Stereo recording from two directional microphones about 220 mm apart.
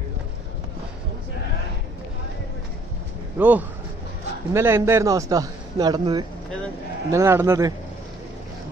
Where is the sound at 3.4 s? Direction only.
5° right (ahead or behind).